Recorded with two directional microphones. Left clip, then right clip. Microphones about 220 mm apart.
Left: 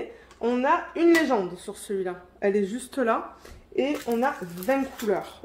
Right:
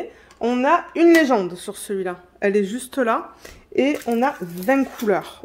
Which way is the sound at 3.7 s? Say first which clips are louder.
Right 6 dB; 60° right (ahead or behind).